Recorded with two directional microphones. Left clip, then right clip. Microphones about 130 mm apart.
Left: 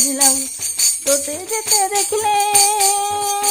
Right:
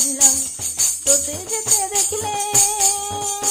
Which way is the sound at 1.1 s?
25° left (ahead or behind).